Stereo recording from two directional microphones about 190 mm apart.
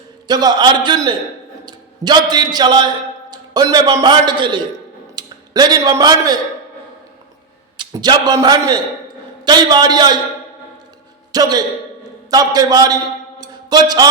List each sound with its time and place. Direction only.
0.3 s a man's voice: 20° right (ahead or behind)
7.8 s a man's voice: 20° right (ahead or behind)
11.3 s a man's voice: 20° right (ahead or behind)
13.4 s a sound: 20° right (ahead or behind)